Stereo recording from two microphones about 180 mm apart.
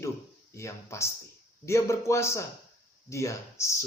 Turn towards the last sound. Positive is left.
turn(degrees=15)  # may be behind; listen again after turning